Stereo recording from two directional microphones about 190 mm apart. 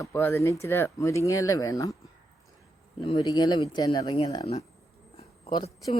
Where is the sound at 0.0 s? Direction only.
15° left (ahead or behind).